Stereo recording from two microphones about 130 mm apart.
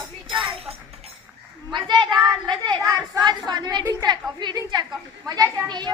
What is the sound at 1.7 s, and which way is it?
A woman's voice, 35° right (ahead or behind).